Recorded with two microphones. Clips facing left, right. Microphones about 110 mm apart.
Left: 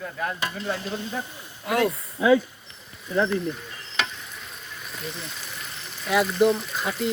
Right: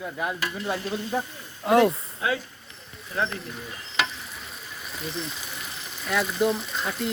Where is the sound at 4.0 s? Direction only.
Centre (ahead or behind).